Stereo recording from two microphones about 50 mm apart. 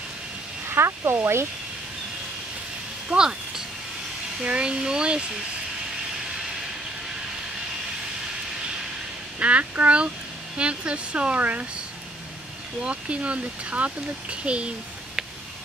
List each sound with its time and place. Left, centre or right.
0.7 s speech: right
3.1 s a sound: centre
4.4 s speech: centre
9.4 s speech: right
12.8 s speech: right